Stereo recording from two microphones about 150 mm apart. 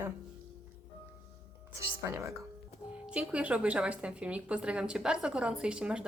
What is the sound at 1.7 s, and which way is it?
Speech, 20° right (ahead or behind).